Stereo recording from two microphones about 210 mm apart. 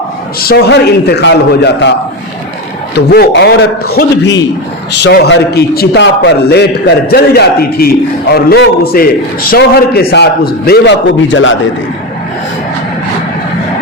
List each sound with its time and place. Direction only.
0.3 s a man's voice: 50° left (ahead or behind)
3.1 s a man's voice: 50° left (ahead or behind)